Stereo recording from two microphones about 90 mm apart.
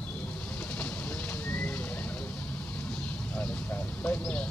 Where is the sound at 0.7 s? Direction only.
15° left (ahead or behind).